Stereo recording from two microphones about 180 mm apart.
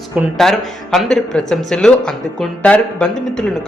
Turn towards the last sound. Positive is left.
turn(degrees=5)  # may be behind; listen again after turning